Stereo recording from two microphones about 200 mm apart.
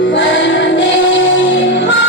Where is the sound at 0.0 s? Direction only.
65° left (ahead or behind).